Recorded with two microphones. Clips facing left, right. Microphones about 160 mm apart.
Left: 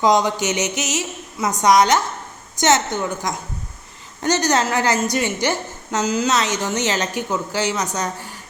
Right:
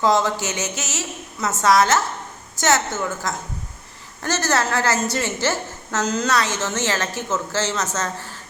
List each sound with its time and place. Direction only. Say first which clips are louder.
0.0 s a woman's voice: left 2 dB; 15° left (ahead or behind)